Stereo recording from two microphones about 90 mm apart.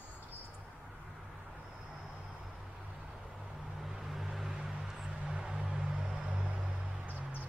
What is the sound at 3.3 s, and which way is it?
Vehicle, 5° right (ahead or behind).